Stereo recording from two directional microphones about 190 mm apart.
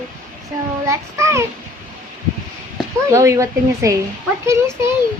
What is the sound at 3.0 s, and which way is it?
A child's voice, 15° right (ahead or behind).